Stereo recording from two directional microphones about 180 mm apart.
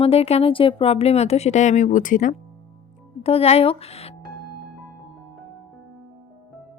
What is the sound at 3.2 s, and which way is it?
Speech, 35° left (ahead or behind).